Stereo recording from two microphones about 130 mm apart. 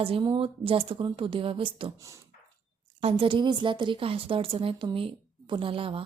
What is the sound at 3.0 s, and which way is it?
A woman's voice, 40° right (ahead or behind).